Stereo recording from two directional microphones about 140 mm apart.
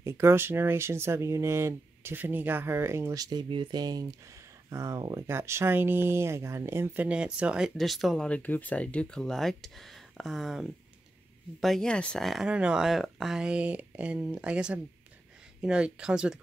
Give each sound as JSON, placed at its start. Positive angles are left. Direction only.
{"t": 0.0, "sound": "speech", "side_deg": -20}